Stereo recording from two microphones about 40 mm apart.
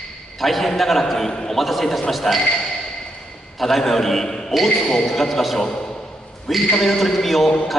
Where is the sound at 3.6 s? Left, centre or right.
Centre.